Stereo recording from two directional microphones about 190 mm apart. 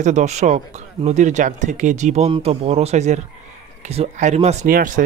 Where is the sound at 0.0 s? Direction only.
35° right (ahead or behind).